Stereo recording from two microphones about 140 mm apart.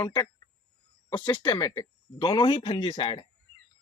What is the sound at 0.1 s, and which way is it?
Speech, 25° left (ahead or behind).